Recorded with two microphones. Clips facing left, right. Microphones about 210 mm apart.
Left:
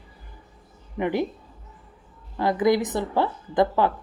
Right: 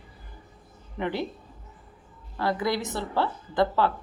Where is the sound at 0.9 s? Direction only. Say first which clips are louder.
Left 5 dB; 15° left (ahead or behind).